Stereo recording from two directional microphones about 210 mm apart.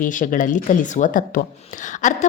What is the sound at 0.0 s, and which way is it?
A woman's voice, 40° left (ahead or behind).